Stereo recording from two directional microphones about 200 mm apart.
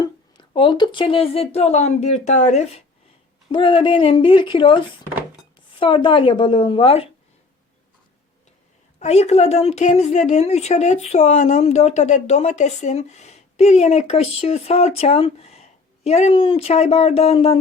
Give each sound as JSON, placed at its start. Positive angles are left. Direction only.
{"t": 0.0, "sound": "a woman's voice", "side_deg": 25}
{"t": 5.8, "sound": "a woman's voice", "side_deg": 25}
{"t": 9.0, "sound": "a woman's voice", "side_deg": 35}